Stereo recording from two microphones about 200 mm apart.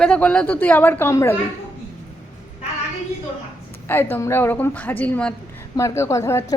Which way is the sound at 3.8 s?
10° left (ahead or behind).